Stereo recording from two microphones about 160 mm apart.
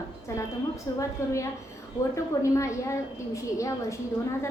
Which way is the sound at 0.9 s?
20° left (ahead or behind).